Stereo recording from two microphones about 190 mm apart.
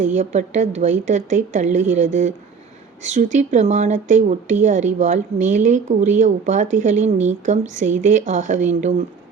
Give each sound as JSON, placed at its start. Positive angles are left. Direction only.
{"t": 0.0, "sound": "speech", "side_deg": -40}